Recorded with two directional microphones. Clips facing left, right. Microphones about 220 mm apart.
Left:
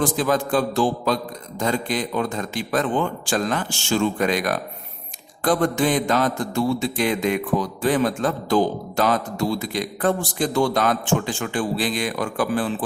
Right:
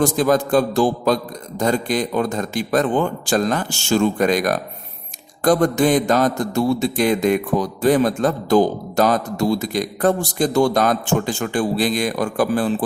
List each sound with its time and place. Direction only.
0.0 s mantra: 40° right (ahead or behind)